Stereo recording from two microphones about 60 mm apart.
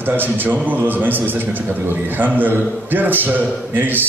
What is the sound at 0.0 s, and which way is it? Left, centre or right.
A man's voice, right.